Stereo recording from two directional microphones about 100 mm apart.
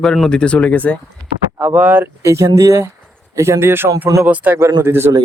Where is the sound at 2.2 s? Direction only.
30° right (ahead or behind).